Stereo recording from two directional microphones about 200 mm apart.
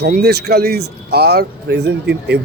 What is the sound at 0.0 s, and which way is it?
Speech, 50° right (ahead or behind).